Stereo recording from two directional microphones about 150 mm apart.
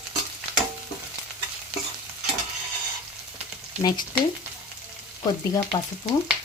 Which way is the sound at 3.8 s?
25° left (ahead or behind).